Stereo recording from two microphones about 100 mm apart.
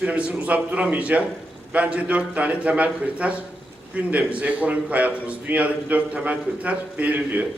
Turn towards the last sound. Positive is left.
turn(degrees=-15)  # may be behind; listen again after turning